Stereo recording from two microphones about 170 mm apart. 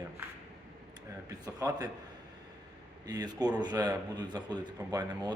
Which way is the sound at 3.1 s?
25° right (ahead or behind).